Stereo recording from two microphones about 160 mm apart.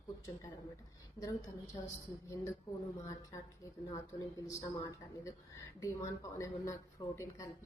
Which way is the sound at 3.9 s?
20° left (ahead or behind).